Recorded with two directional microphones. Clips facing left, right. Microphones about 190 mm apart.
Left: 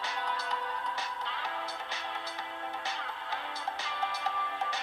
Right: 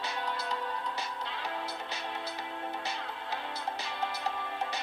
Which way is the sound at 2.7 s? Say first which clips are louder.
Right 1 dB; 10° right (ahead or behind).